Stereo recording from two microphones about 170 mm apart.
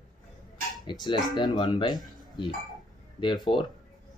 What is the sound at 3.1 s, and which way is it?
Speech, 25° left (ahead or behind).